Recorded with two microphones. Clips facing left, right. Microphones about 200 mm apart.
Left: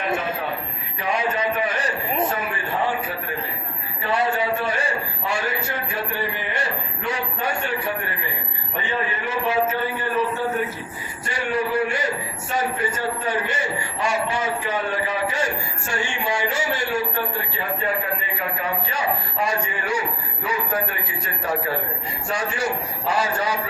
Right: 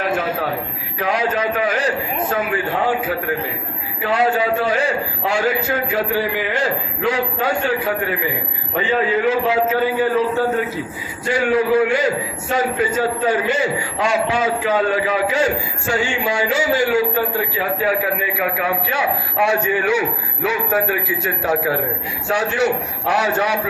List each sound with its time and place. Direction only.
0.9 s a man's voice: 90° right
4.0 s a man's voice: 90° right
11.3 s a man's voice: 90° right; by 23.6 s 75° right (ahead or behind)